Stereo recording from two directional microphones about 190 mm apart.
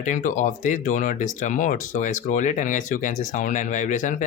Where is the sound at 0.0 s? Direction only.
40° left (ahead or behind).